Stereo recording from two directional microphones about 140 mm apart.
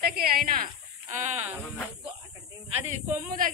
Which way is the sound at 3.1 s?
75° right (ahead or behind).